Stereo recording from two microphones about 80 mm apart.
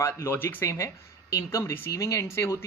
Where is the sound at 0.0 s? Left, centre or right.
Left.